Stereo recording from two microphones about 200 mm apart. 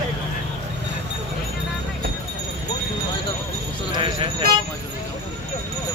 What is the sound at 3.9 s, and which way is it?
Jingle bell, 25° right (ahead or behind).